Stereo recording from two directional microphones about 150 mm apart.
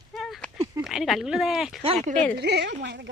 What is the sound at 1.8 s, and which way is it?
Speech, 40° right (ahead or behind).